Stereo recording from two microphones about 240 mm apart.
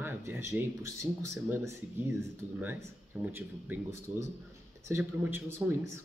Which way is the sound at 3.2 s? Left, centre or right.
Centre.